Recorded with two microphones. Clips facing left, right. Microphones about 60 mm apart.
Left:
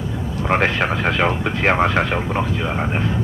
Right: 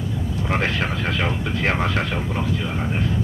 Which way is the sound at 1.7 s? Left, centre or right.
Left.